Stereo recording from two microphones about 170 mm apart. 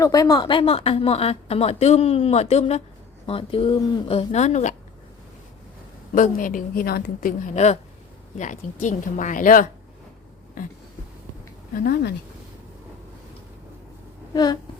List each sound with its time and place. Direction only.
0.0 s speech: 20° left (ahead or behind); by 4.7 s 45° left (ahead or behind)
6.1 s a woman's voice: 50° left (ahead or behind)
11.8 s speech: 65° left (ahead or behind)
14.3 s a sound: 25° left (ahead or behind)